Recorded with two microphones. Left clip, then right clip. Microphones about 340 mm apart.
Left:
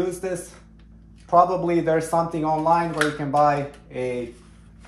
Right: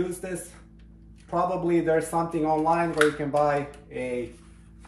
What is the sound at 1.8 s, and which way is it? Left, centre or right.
Speech, centre.